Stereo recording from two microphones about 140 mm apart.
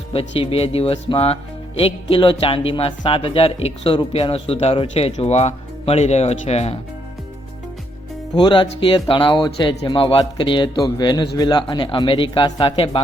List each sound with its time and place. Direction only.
0.1 s speech: 45° left (ahead or behind)
8.4 s speech: 35° left (ahead or behind)